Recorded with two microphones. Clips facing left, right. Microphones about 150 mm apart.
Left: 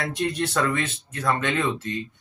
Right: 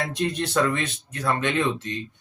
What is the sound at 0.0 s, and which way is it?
Speech, 20° right (ahead or behind).